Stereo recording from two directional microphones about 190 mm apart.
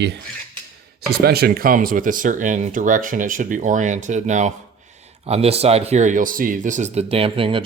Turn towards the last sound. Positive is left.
turn(degrees=-30)  # may be behind; listen again after turning